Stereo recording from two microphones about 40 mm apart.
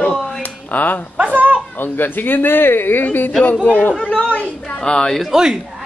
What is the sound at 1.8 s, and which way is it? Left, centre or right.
Speech, left.